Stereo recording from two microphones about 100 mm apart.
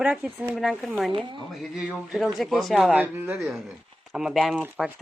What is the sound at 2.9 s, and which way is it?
Speech, 20° right (ahead or behind).